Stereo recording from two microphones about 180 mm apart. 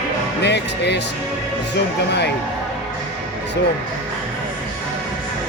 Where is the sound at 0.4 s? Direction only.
70° left (ahead or behind).